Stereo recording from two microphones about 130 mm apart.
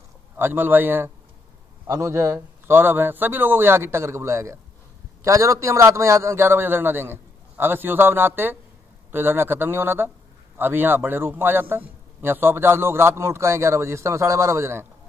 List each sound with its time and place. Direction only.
0.4 s a man's voice: 15° right (ahead or behind)